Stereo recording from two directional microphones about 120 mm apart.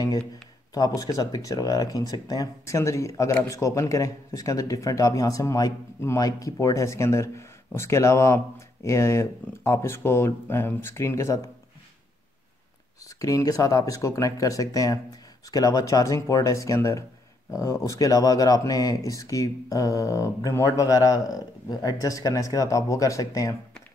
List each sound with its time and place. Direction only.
0.7 s speech: 30° left (ahead or behind)
13.2 s speech: 30° left (ahead or behind)